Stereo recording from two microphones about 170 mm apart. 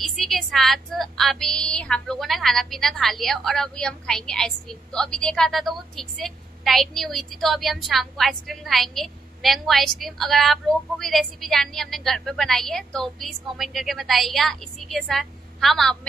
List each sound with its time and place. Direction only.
0.0 s a woman's voice: centre (ahead or behind)